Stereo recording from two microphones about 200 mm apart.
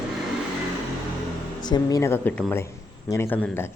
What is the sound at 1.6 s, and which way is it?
Speech, 20° left (ahead or behind).